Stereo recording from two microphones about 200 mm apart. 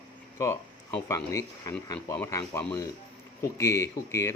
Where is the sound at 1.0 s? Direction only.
15° left (ahead or behind).